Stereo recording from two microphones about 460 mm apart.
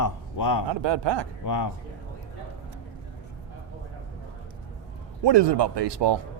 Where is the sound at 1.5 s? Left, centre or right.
Left.